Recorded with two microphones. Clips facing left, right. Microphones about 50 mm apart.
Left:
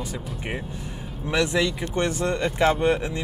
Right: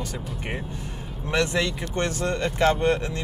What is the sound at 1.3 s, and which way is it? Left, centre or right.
Speech, centre.